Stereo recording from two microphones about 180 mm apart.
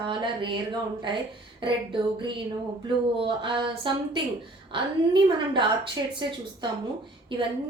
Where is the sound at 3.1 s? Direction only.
30° right (ahead or behind).